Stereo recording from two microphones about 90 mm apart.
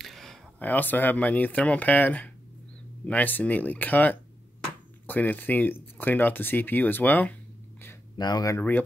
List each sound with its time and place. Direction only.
0.0 s a sound: 5° left (ahead or behind)
0.6 s speech: 20° left (ahead or behind)
8.2 s speech: 50° left (ahead or behind)
8.5 s speech: 20° left (ahead or behind)